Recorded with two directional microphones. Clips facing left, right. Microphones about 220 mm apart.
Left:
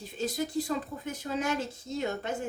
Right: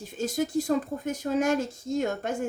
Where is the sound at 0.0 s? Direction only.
45° right (ahead or behind).